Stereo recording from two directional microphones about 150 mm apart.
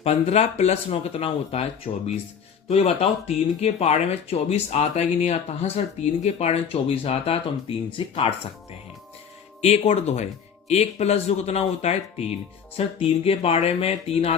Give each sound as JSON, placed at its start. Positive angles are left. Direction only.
{"t": 0.0, "sound": "speech", "side_deg": 45}
{"t": 9.6, "sound": "speech", "side_deg": 45}